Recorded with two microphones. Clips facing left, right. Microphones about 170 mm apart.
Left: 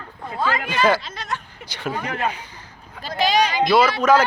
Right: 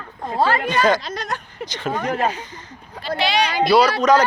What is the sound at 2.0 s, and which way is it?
Speech, 40° right (ahead or behind).